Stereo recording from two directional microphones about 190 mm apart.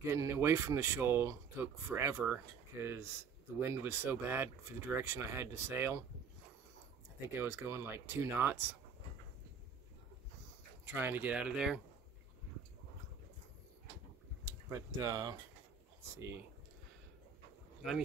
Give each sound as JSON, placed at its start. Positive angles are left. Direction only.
{"t": 0.0, "sound": "speech", "side_deg": -15}
{"t": 7.3, "sound": "speech", "side_deg": -15}
{"t": 10.9, "sound": "speech", "side_deg": -10}
{"t": 14.4, "sound": "speech", "side_deg": -15}